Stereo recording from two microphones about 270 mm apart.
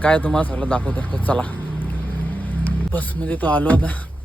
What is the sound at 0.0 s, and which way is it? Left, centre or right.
Vehicle, centre.